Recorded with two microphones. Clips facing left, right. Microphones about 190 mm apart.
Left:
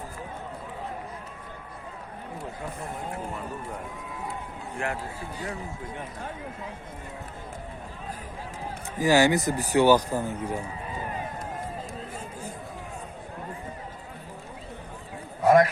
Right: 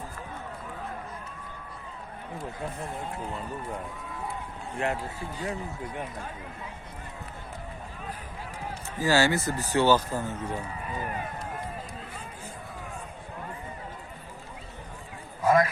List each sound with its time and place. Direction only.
4.8 s a man's voice: 20° right (ahead or behind)
9.0 s speech: 15° left (ahead or behind)
15.4 s a sound: 65° left (ahead or behind)